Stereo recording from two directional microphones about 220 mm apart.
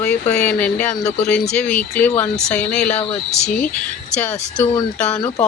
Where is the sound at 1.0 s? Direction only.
30° left (ahead or behind).